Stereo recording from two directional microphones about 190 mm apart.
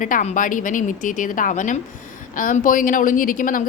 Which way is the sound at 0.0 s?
40° left (ahead or behind).